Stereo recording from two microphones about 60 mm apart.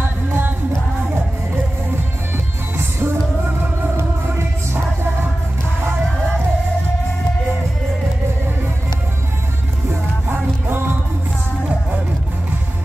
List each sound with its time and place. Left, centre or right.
0.3 s music: right
2.3 s music: right
10.2 s music: right